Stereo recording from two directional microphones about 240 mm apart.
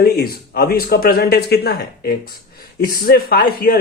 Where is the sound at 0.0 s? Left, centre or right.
Left.